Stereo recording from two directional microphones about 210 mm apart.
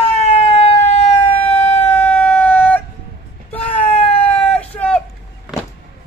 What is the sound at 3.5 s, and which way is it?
Wail, 10° left (ahead or behind).